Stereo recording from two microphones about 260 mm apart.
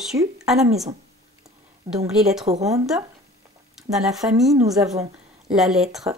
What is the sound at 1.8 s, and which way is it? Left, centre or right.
Speech, centre.